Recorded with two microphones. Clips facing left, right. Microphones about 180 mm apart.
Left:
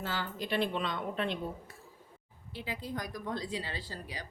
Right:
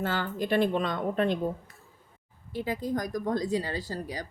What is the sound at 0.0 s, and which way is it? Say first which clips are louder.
Speech: right 7 dB; 55° right (ahead or behind).